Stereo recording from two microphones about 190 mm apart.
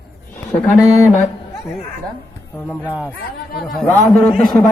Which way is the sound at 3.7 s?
5° left (ahead or behind).